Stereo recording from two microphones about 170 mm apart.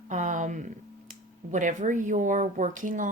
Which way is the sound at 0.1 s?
45° right (ahead or behind).